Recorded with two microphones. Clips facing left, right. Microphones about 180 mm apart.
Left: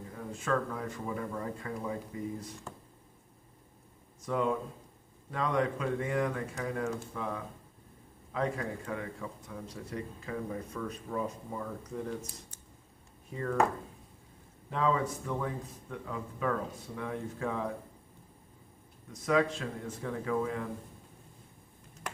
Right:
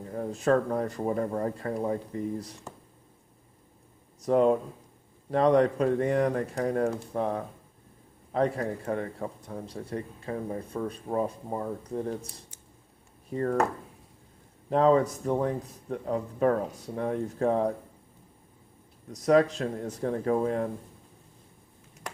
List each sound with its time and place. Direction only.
0.1 s a man's voice: 40° right (ahead or behind)
4.2 s a man's voice: 40° right (ahead or behind)
13.3 s a man's voice: 40° right (ahead or behind)
14.7 s a man's voice: 40° right (ahead or behind)
19.1 s a man's voice: 40° right (ahead or behind)